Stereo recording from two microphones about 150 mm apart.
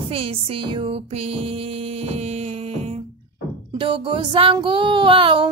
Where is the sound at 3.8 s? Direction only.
35° right (ahead or behind).